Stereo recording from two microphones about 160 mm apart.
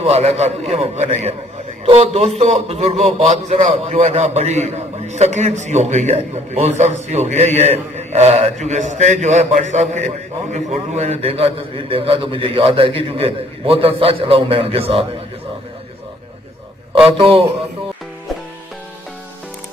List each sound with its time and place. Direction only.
0.0 s a man's voice: 40° right (ahead or behind)
17.2 s a man's voice: 35° right (ahead or behind)